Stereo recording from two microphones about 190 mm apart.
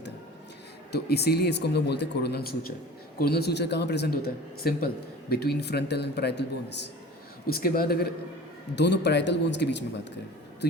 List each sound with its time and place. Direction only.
0.9 s speech: 60° left (ahead or behind)
7.4 s speech: 50° left (ahead or behind)
8.7 s speech: 65° left (ahead or behind)